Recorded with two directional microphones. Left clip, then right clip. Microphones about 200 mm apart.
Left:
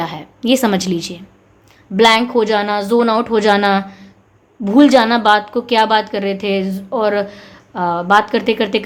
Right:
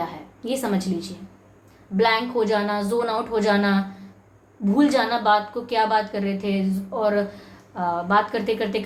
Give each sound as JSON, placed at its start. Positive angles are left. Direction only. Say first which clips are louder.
{"t": 0.0, "sound": "a woman's voice", "louder": "left 8 dB", "side_deg": 45}